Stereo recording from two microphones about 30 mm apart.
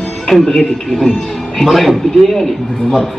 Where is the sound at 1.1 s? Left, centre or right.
Centre.